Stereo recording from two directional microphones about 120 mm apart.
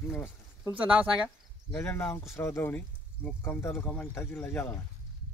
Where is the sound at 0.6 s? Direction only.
10° right (ahead or behind).